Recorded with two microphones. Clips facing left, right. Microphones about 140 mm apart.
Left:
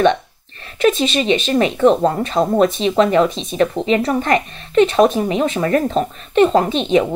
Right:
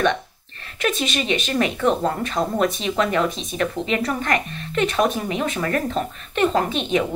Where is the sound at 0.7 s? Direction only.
30° left (ahead or behind).